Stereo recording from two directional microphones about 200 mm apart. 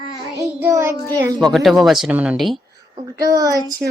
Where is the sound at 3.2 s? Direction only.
15° right (ahead or behind).